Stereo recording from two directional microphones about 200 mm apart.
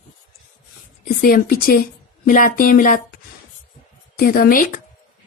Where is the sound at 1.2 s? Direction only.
45° left (ahead or behind).